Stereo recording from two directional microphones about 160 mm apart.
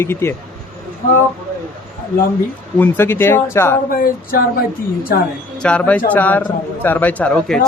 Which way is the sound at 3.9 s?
65° left (ahead or behind).